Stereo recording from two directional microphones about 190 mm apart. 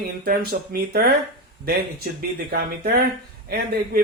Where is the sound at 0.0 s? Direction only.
55° right (ahead or behind).